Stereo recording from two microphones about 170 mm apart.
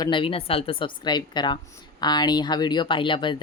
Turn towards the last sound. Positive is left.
turn(degrees=30)  # may be behind; listen again after turning